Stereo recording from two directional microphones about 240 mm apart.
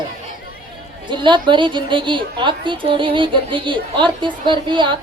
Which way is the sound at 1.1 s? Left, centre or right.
Centre.